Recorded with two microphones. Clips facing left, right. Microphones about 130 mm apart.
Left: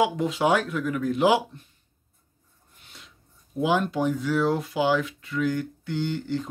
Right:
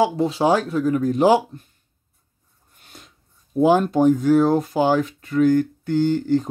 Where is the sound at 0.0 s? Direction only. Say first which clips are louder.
Right 4 dB; 35° right (ahead or behind).